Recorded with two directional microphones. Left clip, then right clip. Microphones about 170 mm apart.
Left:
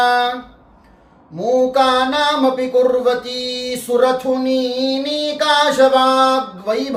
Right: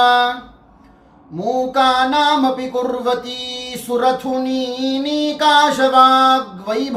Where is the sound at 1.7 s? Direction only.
15° left (ahead or behind).